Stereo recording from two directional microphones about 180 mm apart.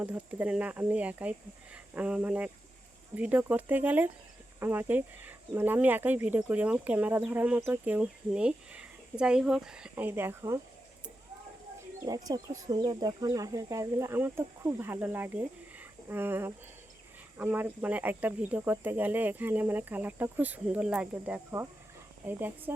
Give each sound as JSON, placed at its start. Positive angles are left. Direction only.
{"t": 0.0, "sound": "speech", "side_deg": -10}
{"t": 12.0, "sound": "speech", "side_deg": -20}